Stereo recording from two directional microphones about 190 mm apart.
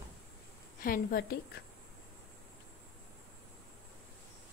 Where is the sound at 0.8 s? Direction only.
50° left (ahead or behind).